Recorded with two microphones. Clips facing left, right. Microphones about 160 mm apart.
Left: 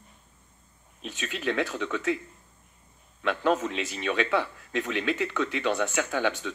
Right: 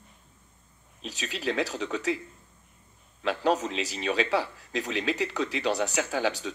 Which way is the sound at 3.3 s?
35° right (ahead or behind).